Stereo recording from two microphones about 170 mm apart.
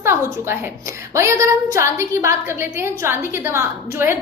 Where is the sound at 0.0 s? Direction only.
15° right (ahead or behind).